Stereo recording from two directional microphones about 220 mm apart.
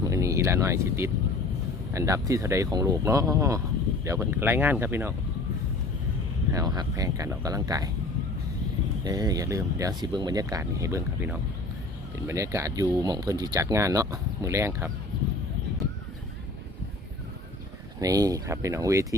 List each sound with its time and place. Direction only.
0.0 s a sound: 15° right (ahead or behind)
1.9 s speech: 15° right (ahead or behind)
6.5 s speech: 15° right (ahead or behind)
9.0 s speech: 15° right (ahead or behind)
18.0 s speech: 15° right (ahead or behind)